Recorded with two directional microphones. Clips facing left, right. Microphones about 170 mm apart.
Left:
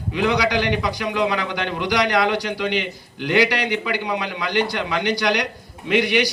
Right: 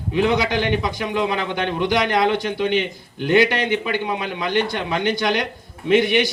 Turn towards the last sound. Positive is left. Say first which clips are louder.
# right 3 dB
turn(degrees=-25)  # may be behind; listen again after turning